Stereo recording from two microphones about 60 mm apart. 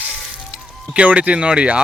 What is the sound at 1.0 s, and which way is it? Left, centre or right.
Speech, right.